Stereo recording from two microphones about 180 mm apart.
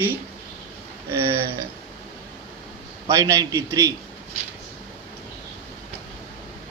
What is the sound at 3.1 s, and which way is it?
Speech, 15° right (ahead or behind).